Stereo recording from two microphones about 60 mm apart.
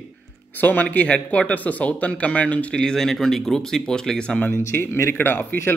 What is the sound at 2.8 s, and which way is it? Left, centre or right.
Speech, centre.